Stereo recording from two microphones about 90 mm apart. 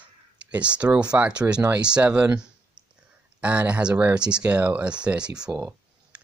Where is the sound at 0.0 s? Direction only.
15° right (ahead or behind).